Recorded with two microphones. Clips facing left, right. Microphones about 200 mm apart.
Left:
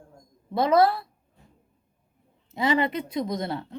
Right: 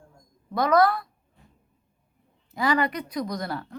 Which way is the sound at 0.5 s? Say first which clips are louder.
Left 1 dB; 25° left (ahead or behind).